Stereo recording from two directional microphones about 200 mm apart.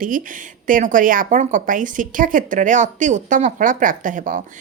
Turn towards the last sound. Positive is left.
turn(degrees=-40)  # may be behind; listen again after turning